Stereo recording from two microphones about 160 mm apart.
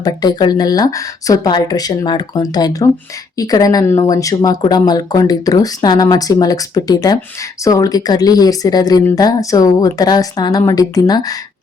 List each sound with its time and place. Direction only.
0.0 s speech: 25° left (ahead or behind)